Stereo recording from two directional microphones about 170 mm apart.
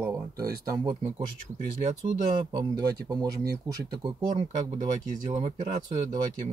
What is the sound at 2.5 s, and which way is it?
Speech, 20° right (ahead or behind).